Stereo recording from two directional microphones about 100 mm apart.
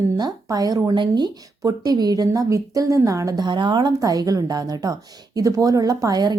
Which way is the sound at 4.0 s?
35° right (ahead or behind).